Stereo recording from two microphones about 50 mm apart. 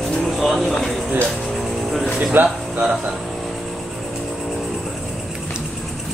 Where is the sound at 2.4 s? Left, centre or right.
Right.